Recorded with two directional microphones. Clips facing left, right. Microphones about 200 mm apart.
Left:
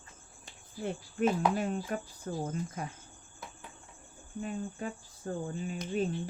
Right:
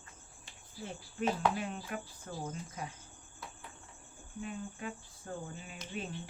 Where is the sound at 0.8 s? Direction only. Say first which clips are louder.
Left 6 dB; 50° left (ahead or behind).